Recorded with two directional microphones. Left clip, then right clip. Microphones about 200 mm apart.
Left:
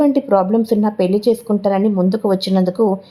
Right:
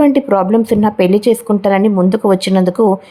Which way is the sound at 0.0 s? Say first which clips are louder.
Right 3 dB; 15° right (ahead or behind).